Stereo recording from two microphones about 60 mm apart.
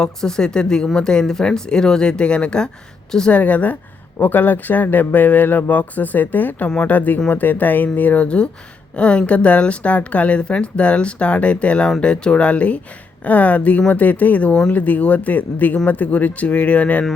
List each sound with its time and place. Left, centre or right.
0.0 s speech: centre
3.3 s a woman's voice: left